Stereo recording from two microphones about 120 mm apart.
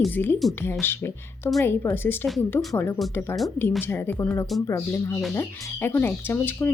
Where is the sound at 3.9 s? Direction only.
15° left (ahead or behind).